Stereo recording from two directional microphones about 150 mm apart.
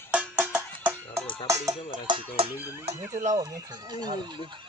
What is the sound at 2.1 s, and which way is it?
Speech, 35° right (ahead or behind).